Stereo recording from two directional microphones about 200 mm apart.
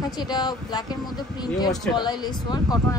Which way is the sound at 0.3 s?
20° left (ahead or behind).